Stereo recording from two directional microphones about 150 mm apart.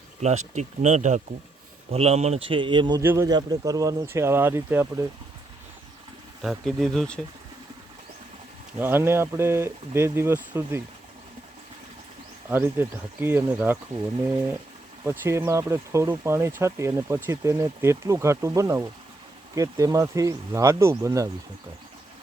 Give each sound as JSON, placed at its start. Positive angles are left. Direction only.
{"t": 0.2, "sound": "speech", "side_deg": -50}
{"t": 3.0, "sound": "speech", "side_deg": -15}
{"t": 3.2, "sound": "speech", "side_deg": -25}
{"t": 6.4, "sound": "speech", "side_deg": 0}
{"t": 8.8, "sound": "speech", "side_deg": -15}
{"t": 12.5, "sound": "speech", "side_deg": -15}
{"t": 15.0, "sound": "speech", "side_deg": -15}